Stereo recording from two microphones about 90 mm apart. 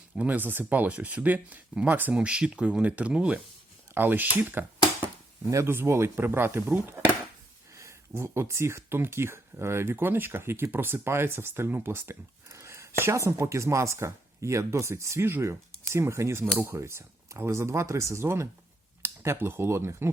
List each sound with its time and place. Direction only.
0.2 s speech: 20° right (ahead or behind)